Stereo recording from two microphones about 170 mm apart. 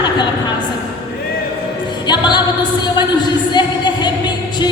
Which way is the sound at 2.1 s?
25° left (ahead or behind).